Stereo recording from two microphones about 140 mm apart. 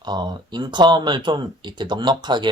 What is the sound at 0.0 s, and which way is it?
Speech, 30° right (ahead or behind).